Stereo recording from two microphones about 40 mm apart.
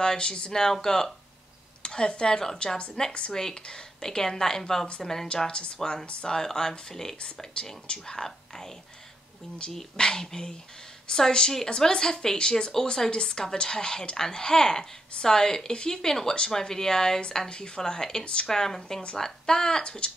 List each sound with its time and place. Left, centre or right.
0.0 s a woman's voice: left
5.3 s a woman's voice: left
7.2 s a woman's voice: left
18.2 s a woman's voice: left
18.5 s speech: centre